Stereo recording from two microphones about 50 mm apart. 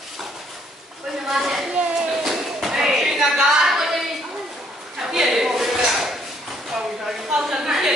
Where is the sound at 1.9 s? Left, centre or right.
Centre.